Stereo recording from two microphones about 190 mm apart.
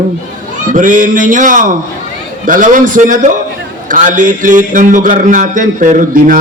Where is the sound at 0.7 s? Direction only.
45° right (ahead or behind).